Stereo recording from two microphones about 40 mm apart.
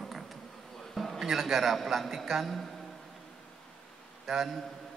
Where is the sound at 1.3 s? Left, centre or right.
Centre.